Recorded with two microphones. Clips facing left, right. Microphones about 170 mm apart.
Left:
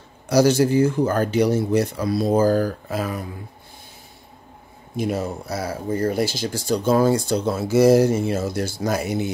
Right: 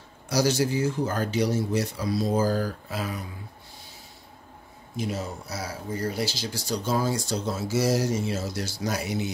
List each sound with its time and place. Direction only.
0.3 s a man's voice: 55° left (ahead or behind)
4.9 s speech: 55° left (ahead or behind)